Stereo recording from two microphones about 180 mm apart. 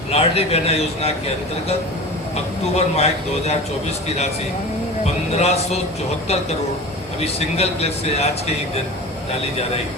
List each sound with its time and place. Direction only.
0.1 s a man's voice: 35° left (ahead or behind)
2.7 s a man's voice: 35° left (ahead or behind)
5.0 s a man's voice: 35° left (ahead or behind)
7.3 s a man's voice: 35° left (ahead or behind)